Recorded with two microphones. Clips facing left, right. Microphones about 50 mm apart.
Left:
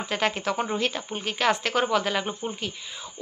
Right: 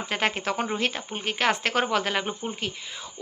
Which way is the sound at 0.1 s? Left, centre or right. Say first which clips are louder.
Even; right.